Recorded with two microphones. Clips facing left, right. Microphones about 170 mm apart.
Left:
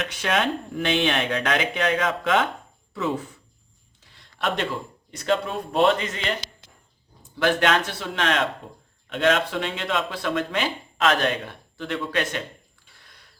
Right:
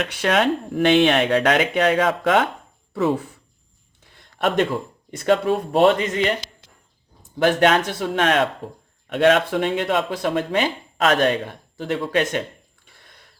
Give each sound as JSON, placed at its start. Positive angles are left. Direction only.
{"t": 0.0, "sound": "speech", "side_deg": -60}
{"t": 4.1, "sound": "a sound", "side_deg": -50}
{"t": 5.1, "sound": "speech", "side_deg": -55}
{"t": 7.3, "sound": "speech", "side_deg": -40}